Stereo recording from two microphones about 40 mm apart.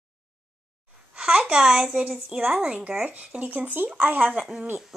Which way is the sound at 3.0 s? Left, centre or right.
Right.